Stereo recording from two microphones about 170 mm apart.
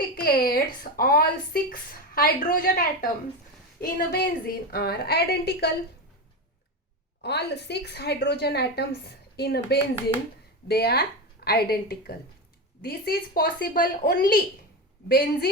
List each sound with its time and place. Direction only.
0.2 s a woman's voice: 60° left (ahead or behind)
7.2 s a woman's voice: 80° left; by 15.4 s 60° left (ahead or behind)